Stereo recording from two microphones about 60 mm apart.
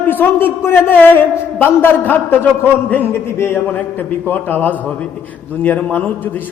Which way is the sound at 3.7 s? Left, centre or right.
Left.